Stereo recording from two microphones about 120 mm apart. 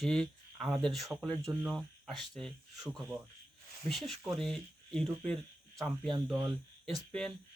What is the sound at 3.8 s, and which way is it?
Speech, centre (ahead or behind).